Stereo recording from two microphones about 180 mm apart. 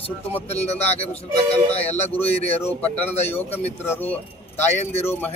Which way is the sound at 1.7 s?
35° left (ahead or behind).